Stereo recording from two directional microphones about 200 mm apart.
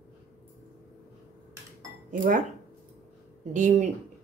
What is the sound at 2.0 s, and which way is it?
Speech, 40° right (ahead or behind).